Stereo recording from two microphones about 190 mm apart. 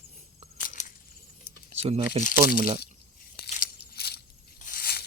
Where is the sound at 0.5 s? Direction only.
45° left (ahead or behind).